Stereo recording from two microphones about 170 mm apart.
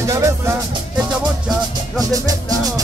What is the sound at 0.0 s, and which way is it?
Music, 15° right (ahead or behind).